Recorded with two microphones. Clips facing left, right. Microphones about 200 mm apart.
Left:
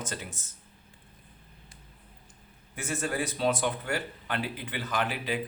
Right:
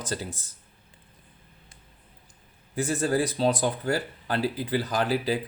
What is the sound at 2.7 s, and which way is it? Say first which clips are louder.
Speech: right 7 dB; 35° right (ahead or behind).